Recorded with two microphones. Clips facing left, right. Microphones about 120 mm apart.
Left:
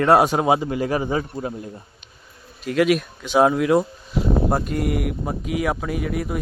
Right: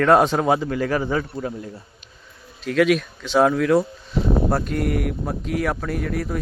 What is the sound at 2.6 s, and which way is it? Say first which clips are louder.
Speech: even; 5° left (ahead or behind).